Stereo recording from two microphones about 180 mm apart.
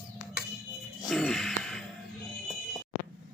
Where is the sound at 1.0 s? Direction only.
Centre (ahead or behind).